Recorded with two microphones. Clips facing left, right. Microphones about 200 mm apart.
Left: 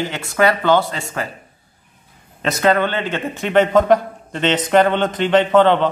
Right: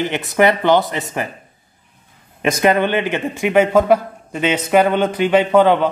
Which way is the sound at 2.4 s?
15° right (ahead or behind).